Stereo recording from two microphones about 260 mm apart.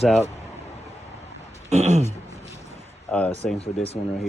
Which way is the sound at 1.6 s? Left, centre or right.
Right.